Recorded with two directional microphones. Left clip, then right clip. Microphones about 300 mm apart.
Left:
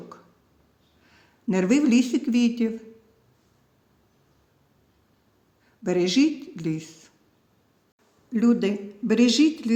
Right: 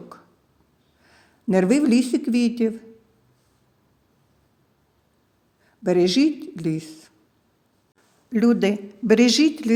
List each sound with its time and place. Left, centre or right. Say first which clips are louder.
1.0 s speech: right 3 dB; right
5.8 s speech: right 3 dB; right
8.3 s speech: right 3 dB; right